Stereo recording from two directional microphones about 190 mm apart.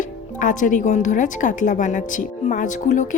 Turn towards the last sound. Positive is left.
turn(degrees=40)  # may be behind; listen again after turning